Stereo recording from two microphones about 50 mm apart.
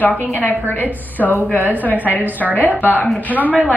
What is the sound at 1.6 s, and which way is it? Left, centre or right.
A woman's voice, left.